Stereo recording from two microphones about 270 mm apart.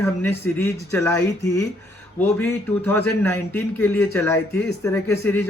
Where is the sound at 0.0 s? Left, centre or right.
Centre.